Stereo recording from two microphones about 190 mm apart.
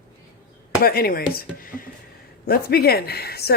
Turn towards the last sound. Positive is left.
turn(degrees=55)  # may be behind; listen again after turning